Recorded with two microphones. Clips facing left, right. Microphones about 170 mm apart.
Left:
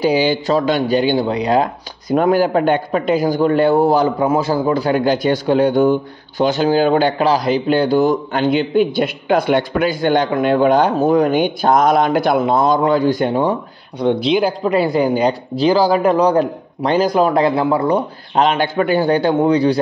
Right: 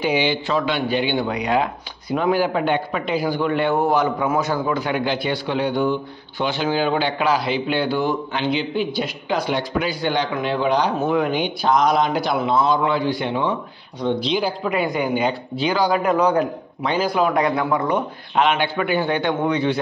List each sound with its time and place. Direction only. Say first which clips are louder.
0.0 s speech: left 5 dB; 40° left (ahead or behind)
11.0 s speech: left 6 dB; 40° left (ahead or behind)
13.9 s speech: left 6 dB; 60° left (ahead or behind)
14.6 s a man's voice: left 6 dB; 35° left (ahead or behind)